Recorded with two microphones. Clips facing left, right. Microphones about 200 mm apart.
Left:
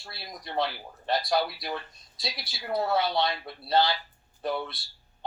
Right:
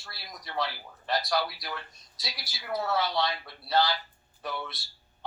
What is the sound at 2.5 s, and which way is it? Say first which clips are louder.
Speech: left 3 dB; 25° left (ahead or behind).